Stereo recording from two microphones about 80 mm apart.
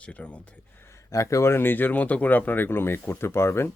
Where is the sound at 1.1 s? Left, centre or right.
Left.